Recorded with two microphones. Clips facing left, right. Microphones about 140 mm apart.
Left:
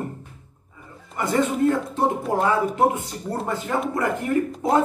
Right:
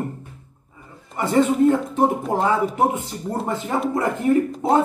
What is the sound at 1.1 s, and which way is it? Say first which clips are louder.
Speech: right 4 dB; 20° right (ahead or behind).